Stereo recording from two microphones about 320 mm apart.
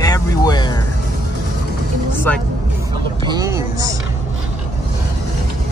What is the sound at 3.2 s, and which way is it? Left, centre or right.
Speech, centre.